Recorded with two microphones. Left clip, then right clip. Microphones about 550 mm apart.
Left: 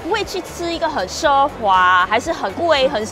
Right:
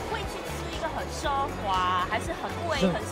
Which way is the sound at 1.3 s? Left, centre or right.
Left.